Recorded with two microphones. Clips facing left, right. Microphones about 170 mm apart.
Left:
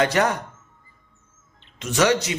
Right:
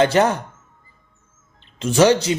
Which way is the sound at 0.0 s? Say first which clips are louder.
Right 4 dB; 25° right (ahead or behind).